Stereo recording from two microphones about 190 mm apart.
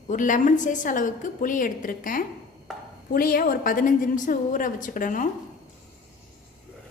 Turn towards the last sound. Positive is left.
turn(degrees=45)  # may be behind; listen again after turning